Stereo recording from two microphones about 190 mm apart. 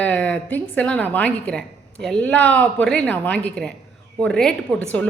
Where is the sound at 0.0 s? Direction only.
10° left (ahead or behind).